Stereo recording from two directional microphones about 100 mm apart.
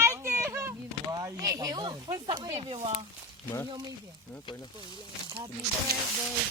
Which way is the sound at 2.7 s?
65° right (ahead or behind).